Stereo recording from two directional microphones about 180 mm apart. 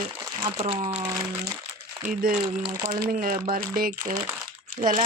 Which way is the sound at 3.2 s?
50° right (ahead or behind).